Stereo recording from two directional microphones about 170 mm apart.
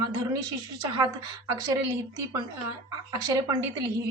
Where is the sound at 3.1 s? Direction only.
20° right (ahead or behind).